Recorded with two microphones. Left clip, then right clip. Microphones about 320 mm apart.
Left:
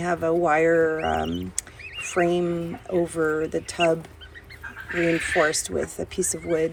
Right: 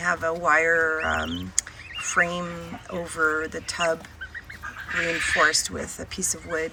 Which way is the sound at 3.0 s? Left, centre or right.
Left.